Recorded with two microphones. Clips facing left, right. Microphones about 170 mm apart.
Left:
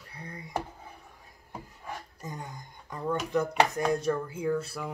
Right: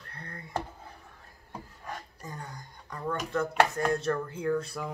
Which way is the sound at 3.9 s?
15° left (ahead or behind).